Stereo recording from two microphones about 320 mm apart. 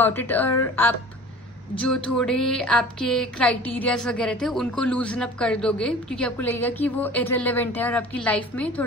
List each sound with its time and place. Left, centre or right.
0.0 s a woman's voice: centre